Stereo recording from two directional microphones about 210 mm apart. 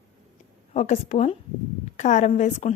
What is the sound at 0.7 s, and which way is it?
A woman's voice, 35° left (ahead or behind).